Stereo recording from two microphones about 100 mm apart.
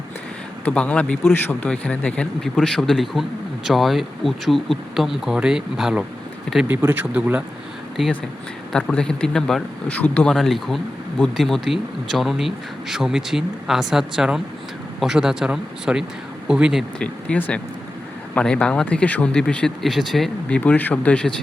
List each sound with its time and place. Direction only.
0.6 s speech: 10° left (ahead or behind); by 6.1 s 5° right (ahead or behind)
6.7 s speech: 15° right (ahead or behind)
8.7 s speech: 10° left (ahead or behind)
10.3 s speech: centre (ahead or behind)
17.0 s speech: 15° left (ahead or behind)
20.5 s speech: 15° left (ahead or behind)